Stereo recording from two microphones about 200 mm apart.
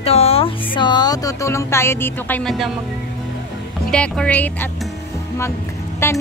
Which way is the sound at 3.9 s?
5° left (ahead or behind).